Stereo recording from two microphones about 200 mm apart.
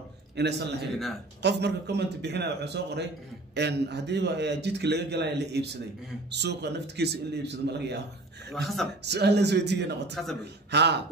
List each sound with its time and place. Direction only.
0.4 s a man's voice: 55° right (ahead or behind)
8.5 s a man's voice: centre (ahead or behind)
9.0 s a man's voice: 55° right (ahead or behind)